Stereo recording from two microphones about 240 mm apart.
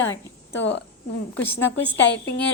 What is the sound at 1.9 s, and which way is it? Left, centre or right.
Speech, left.